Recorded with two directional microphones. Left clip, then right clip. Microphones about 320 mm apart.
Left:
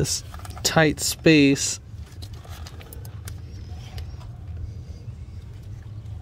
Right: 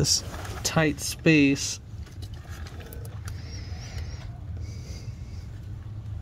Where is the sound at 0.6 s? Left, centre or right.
Centre.